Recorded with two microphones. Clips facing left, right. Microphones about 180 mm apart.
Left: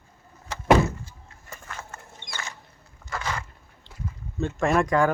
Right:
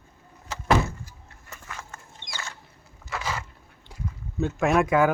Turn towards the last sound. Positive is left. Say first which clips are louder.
# right 1 dB
turn(degrees=-5)  # may be behind; listen again after turning